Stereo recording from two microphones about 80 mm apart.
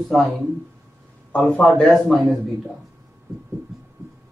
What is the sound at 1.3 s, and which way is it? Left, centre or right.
A man's voice, centre.